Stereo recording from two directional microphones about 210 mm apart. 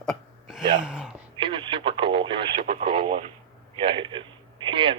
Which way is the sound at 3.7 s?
25° right (ahead or behind).